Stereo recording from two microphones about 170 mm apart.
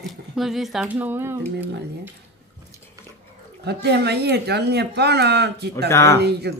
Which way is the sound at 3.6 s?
75° right (ahead or behind).